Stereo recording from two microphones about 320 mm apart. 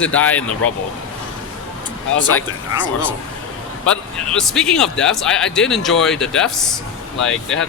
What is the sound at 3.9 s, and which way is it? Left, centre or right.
A man's voice, centre.